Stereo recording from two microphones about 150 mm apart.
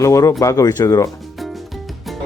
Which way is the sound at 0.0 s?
20° left (ahead or behind).